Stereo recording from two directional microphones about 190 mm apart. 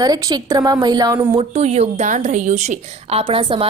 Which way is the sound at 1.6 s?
35° right (ahead or behind).